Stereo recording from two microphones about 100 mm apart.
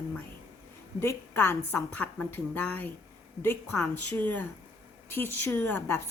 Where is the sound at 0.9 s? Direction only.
25° left (ahead or behind).